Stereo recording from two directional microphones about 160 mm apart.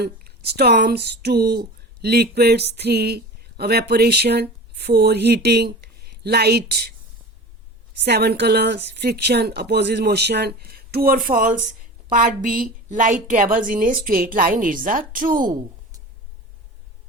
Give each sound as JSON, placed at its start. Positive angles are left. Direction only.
{"t": 0.0, "sound": "speech", "side_deg": -85}
{"t": 8.0, "sound": "a woman's voice", "side_deg": -90}